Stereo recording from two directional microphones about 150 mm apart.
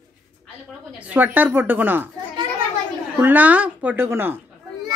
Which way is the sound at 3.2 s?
10° right (ahead or behind).